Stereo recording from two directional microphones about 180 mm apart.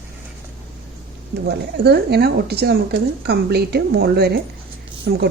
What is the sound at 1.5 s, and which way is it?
Speech, 65° right (ahead or behind).